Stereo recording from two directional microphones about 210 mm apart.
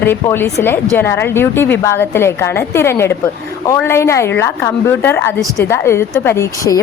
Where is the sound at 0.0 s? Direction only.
10° left (ahead or behind).